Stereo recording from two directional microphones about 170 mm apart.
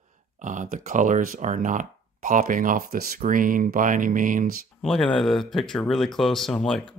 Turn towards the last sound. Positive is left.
turn(degrees=5)  # may be behind; listen again after turning